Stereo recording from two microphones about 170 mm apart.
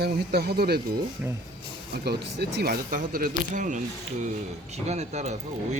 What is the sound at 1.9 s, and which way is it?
Speech, 70° right (ahead or behind).